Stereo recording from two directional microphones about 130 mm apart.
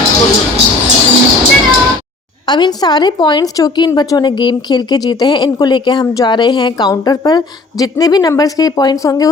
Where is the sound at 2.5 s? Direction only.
30° left (ahead or behind).